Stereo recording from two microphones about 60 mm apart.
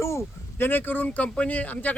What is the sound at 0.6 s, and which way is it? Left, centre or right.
Speech, left.